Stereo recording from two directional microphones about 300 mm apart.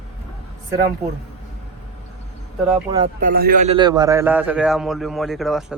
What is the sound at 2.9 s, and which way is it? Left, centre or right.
Speech, centre.